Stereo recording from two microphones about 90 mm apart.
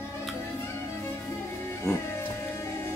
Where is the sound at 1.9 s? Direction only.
30° left (ahead or behind).